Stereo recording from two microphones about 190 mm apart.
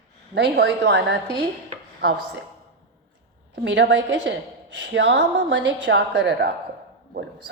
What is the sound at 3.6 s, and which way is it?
A woman's voice, 70° right (ahead or behind).